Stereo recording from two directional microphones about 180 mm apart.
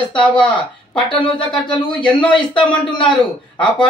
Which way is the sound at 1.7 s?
25° left (ahead or behind).